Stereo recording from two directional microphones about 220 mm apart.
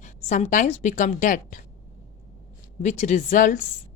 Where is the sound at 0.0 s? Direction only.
35° left (ahead or behind).